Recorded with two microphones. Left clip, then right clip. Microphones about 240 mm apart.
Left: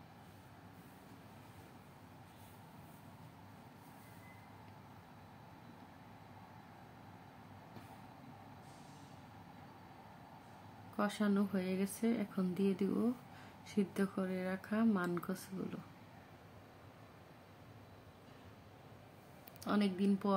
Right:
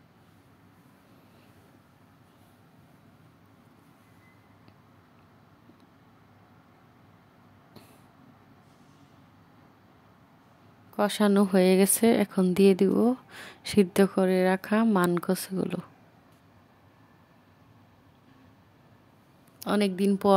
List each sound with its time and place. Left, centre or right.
11.0 s speech: right
19.6 s speech: right